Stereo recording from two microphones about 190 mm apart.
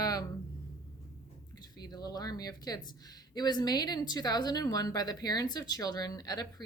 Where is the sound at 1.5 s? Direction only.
20° left (ahead or behind).